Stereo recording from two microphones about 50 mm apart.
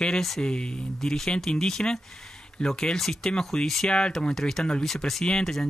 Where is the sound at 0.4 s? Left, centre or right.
Centre.